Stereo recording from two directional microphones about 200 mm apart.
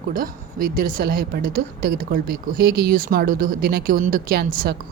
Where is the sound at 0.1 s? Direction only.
45° right (ahead or behind).